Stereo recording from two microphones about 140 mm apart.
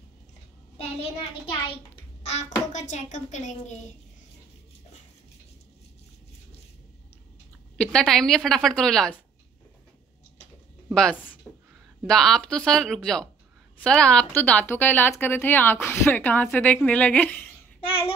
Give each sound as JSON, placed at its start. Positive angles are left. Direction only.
{"t": 2.2, "sound": "a child's voice", "side_deg": 55}
{"t": 7.7, "sound": "speech", "side_deg": 10}
{"t": 11.5, "sound": "a sound", "side_deg": 10}
{"t": 12.1, "sound": "a woman's voice", "side_deg": 5}
{"t": 17.8, "sound": "child singing", "side_deg": 40}